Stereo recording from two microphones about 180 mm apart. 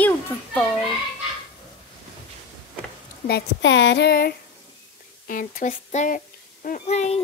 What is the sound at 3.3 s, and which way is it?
Speech, 80° left.